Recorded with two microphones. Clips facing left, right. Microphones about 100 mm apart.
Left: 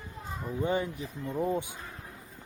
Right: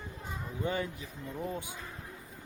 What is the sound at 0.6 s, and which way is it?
Speech, 20° left (ahead or behind).